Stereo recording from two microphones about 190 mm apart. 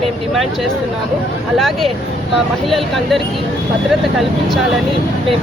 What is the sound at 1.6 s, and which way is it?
Speech, centre (ahead or behind).